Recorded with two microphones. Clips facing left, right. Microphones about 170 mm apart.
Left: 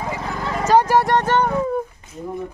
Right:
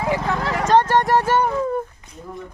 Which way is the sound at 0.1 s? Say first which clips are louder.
Right 6 dB; 80° right.